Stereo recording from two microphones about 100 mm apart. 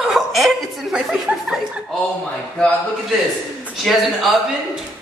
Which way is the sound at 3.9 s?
5° left (ahead or behind).